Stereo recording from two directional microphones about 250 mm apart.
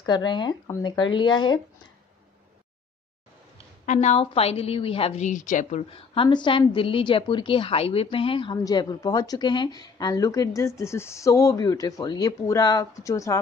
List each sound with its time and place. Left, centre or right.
0.0 s a woman's voice: centre
3.8 s a woman's voice: left; by 13.4 s centre